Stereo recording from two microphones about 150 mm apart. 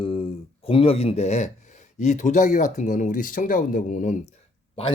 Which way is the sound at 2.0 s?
55° left (ahead or behind).